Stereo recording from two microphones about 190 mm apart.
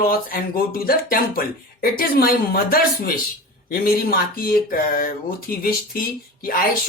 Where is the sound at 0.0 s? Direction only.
50° left (ahead or behind).